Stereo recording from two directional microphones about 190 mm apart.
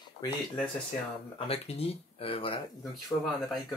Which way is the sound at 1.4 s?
30° left (ahead or behind).